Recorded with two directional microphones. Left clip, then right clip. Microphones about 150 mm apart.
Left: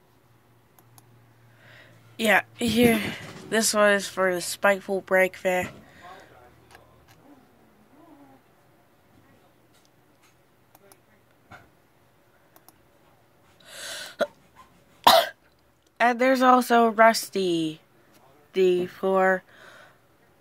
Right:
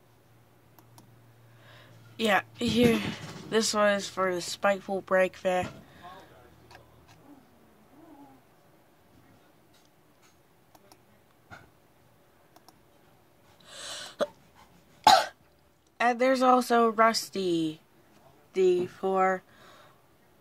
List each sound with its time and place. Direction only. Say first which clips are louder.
1.6 s a woman's voice: left 3 dB; 5° right (ahead or behind)
13.6 s gasp: left 3 dB; centre (ahead or behind)
15.0 s cough: left 3 dB; 15° left (ahead or behind)
16.0 s speech: left 4 dB; 10° left (ahead or behind)